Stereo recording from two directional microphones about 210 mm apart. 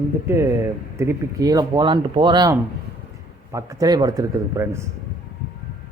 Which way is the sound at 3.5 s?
15° right (ahead or behind).